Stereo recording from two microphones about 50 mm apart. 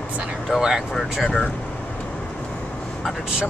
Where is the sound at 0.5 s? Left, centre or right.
Centre.